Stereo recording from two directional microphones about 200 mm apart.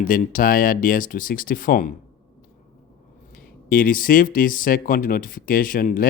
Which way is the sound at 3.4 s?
45° left (ahead or behind).